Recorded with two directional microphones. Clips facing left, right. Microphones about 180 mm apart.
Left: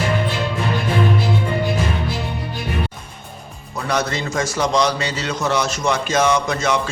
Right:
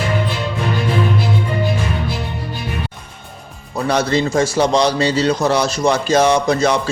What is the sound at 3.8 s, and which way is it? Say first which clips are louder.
A man's voice: right 5 dB; 30° right (ahead or behind).